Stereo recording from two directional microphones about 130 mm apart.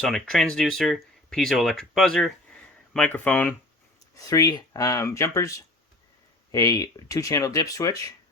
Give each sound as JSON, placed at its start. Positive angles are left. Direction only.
{"t": 0.0, "sound": "speech", "side_deg": 5}
{"t": 2.9, "sound": "speech", "side_deg": 10}
{"t": 4.3, "sound": "speech", "side_deg": 30}